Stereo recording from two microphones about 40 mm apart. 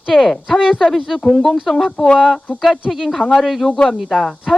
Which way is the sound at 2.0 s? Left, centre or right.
Left.